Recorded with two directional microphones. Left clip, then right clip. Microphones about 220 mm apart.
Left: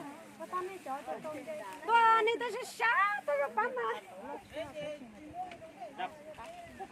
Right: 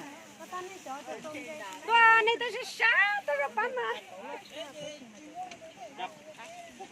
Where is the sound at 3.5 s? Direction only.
50° left (ahead or behind).